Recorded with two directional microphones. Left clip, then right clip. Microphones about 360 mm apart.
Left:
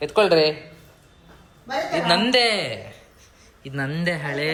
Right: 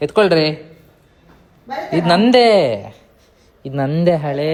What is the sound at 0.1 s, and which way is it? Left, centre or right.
Speech, right.